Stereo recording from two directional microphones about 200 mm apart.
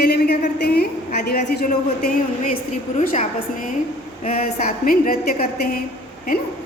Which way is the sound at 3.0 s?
40° left (ahead or behind).